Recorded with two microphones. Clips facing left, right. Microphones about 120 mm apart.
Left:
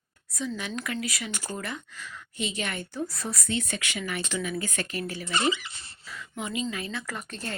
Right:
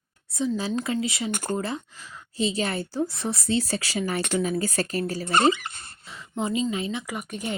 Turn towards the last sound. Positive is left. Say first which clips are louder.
# right 5 dB
turn(degrees=-15)  # may be behind; listen again after turning